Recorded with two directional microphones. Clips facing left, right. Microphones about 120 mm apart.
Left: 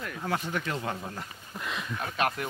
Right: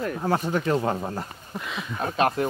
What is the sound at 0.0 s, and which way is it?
Speech, 35° right (ahead or behind).